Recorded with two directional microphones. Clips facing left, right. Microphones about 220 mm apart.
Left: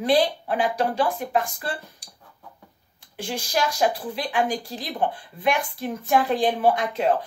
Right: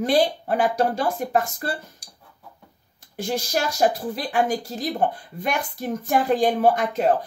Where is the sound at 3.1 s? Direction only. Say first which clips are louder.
Right 2 dB; 45° right (ahead or behind).